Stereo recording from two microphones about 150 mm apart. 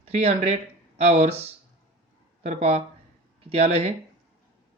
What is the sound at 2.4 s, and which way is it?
Speech, 45° right (ahead or behind).